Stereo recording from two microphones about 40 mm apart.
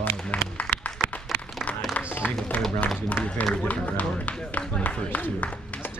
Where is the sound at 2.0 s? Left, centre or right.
Left.